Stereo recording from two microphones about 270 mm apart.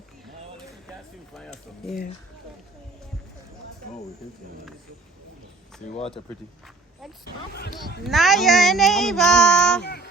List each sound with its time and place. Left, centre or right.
7.3 s speech: left
8.0 s speech: centre
9.8 s speech: left